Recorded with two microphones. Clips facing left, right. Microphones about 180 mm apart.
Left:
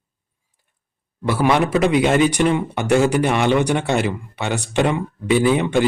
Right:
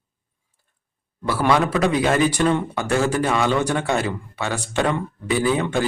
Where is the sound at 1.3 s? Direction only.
20° left (ahead or behind).